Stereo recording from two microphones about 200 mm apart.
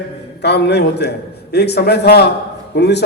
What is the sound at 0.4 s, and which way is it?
A man's voice, 55° left (ahead or behind).